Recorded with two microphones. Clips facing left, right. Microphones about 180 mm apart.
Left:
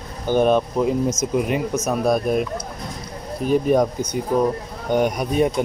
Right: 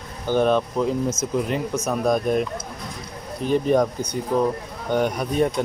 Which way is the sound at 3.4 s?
10° left (ahead or behind).